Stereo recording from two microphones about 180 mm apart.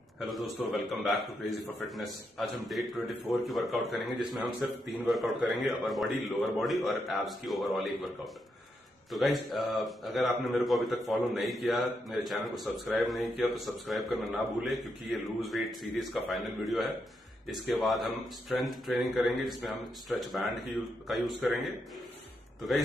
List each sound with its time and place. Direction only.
0.2 s a man's voice: centre (ahead or behind)